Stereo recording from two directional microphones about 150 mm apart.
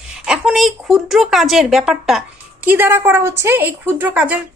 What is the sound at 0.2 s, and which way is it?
Speech, 5° right (ahead or behind).